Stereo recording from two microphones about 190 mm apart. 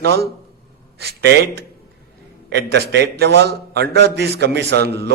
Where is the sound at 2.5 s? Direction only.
60° right (ahead or behind).